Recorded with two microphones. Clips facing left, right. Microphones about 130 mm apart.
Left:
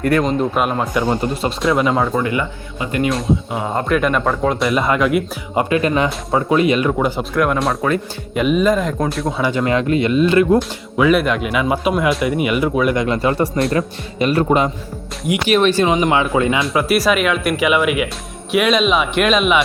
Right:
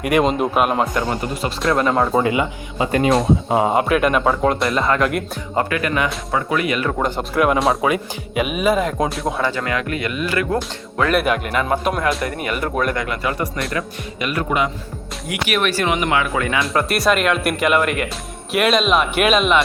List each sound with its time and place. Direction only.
0.0 s speech: 15° right (ahead or behind)
0.5 s speech: 5° right (ahead or behind)
0.9 s speech: 15° left (ahead or behind)
1.6 s speech: centre (ahead or behind)
2.1 s speech: 20° right (ahead or behind)
3.8 s speech: 5° right (ahead or behind)
5.5 s speech: 25° left (ahead or behind)
7.0 s speech: centre (ahead or behind)
9.4 s speech: 20° left (ahead or behind)
10.6 s speech: 5° left (ahead or behind)
13.0 s speech: 25° left (ahead or behind)
16.6 s speech: centre (ahead or behind)